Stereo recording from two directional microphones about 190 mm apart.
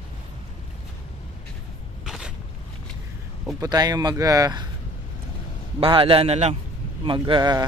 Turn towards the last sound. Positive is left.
turn(degrees=-20)  # may be behind; listen again after turning